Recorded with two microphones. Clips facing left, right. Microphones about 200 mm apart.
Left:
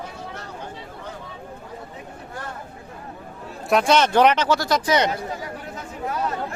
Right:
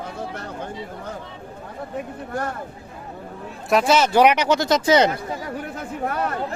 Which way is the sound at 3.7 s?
5° right (ahead or behind).